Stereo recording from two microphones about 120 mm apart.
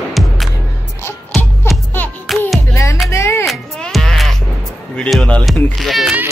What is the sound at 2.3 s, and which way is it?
Music, centre (ahead or behind).